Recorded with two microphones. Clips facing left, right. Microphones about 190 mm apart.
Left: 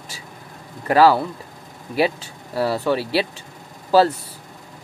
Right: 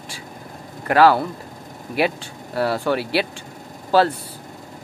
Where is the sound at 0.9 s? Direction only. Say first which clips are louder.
Even; 5° left (ahead or behind).